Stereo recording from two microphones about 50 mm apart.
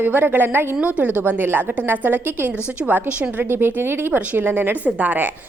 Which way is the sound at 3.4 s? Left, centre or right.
Right.